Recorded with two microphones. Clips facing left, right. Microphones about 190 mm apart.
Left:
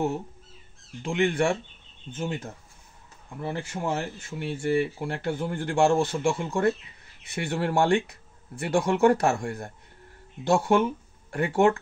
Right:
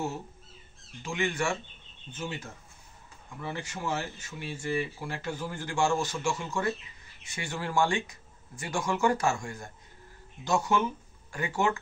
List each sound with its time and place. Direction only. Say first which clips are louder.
1.0 s speech: left 7 dB; 55° left (ahead or behind)